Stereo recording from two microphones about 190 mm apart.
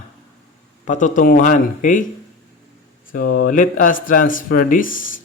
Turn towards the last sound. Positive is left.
turn(degrees=45)  # may be behind; listen again after turning